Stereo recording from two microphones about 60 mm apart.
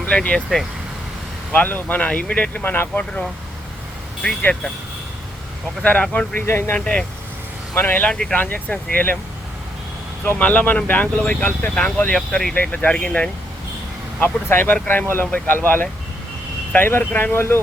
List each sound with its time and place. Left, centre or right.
0.1 s speech: centre
1.5 s speech: left
2.6 s speech: left
3.0 s speech: centre
5.8 s speech: left
6.4 s speech: left
6.7 s speech: centre
8.1 s speech: centre
8.4 s speech: left
10.3 s speech: left; by 12.5 s centre
12.5 s speech: left
14.2 s speech: left